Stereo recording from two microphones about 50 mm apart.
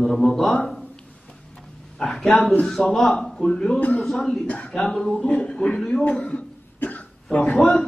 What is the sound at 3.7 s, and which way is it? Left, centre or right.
Speech, left.